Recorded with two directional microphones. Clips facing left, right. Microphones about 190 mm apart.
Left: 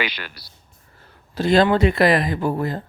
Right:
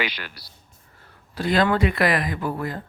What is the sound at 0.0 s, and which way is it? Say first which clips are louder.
Speech: left 2 dB; 80° left.